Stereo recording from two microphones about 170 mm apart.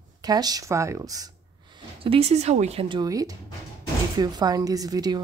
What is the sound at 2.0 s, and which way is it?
Speech, 35° right (ahead or behind).